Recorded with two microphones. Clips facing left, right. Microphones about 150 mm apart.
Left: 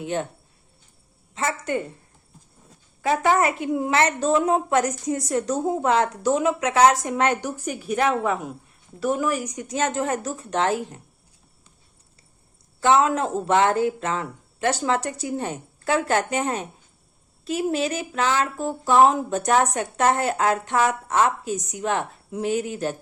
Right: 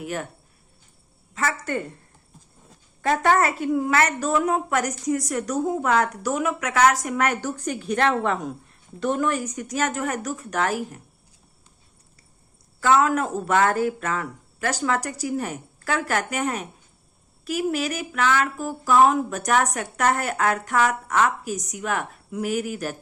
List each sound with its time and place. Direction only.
0.0 s speech: 25° left (ahead or behind)
1.3 s speech: 25° left (ahead or behind)
3.0 s speech: 10° left (ahead or behind); by 7.5 s 25° left (ahead or behind)
7.5 s a woman's voice: 10° left (ahead or behind); by 11.0 s 25° left (ahead or behind)
12.8 s speech: 25° left (ahead or behind)